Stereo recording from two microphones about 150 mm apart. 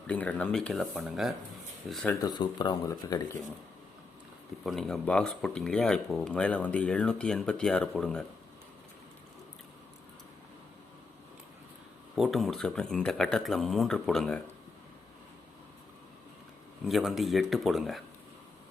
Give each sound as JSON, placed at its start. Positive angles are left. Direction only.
{"t": 0.1, "sound": "speech", "side_deg": 10}
{"t": 2.2, "sound": "speech", "side_deg": 30}
{"t": 4.6, "sound": "speech", "side_deg": 0}
{"t": 12.1, "sound": "speech", "side_deg": 0}
{"t": 16.8, "sound": "speech", "side_deg": 0}